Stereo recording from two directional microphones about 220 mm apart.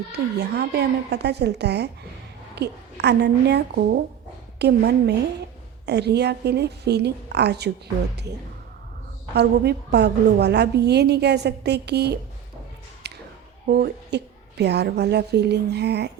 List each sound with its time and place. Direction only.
0.1 s a woman's voice: 50° right (ahead or behind)
9.3 s a woman's voice: 50° right (ahead or behind)
13.0 s a sound: 50° right (ahead or behind)
13.7 s a woman's voice: 45° right (ahead or behind)